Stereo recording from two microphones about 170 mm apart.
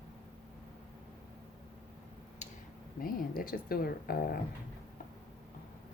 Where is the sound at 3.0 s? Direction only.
60° left (ahead or behind).